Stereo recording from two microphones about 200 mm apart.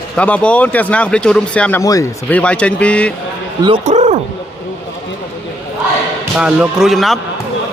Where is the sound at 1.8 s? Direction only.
15° left (ahead or behind).